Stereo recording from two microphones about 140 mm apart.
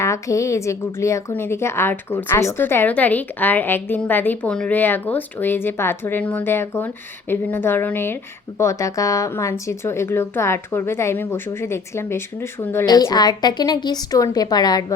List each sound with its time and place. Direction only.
0.0 s a woman's voice: 20° left (ahead or behind)
12.8 s a woman's voice: 30° left (ahead or behind)